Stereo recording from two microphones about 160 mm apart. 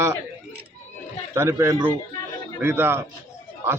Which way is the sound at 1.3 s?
15° right (ahead or behind).